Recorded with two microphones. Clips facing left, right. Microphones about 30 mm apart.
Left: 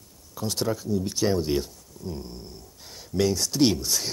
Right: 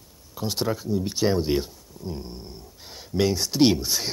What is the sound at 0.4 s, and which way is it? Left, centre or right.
Speech, centre.